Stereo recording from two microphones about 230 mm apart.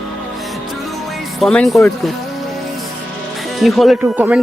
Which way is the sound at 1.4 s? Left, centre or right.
Centre.